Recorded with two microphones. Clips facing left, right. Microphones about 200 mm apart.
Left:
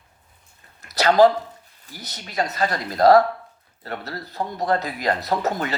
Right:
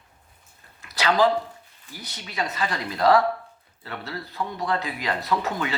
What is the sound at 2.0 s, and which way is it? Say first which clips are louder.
Speech: left 4 dB; 40° left (ahead or behind).